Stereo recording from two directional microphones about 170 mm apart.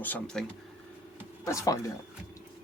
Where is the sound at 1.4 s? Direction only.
20° left (ahead or behind).